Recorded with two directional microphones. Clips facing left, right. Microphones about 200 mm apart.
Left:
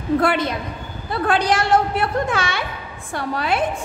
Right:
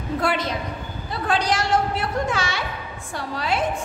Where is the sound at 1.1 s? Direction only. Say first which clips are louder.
Left 4 dB; 60° left (ahead or behind).